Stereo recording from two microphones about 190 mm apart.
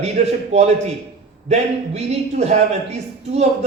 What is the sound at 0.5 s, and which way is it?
Speech, 35° right (ahead or behind).